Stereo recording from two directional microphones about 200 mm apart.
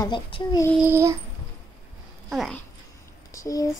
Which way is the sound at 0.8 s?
10° right (ahead or behind).